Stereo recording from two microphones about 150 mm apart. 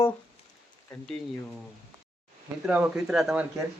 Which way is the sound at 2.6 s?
5° right (ahead or behind).